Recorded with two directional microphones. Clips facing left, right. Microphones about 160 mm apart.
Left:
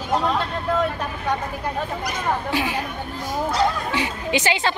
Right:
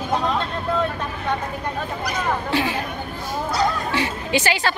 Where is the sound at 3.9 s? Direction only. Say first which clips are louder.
Right 1 dB; 15° left (ahead or behind).